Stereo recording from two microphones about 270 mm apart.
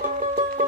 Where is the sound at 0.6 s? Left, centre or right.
Right.